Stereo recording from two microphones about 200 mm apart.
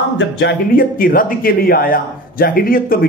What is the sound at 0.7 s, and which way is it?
Speech, 45° left (ahead or behind).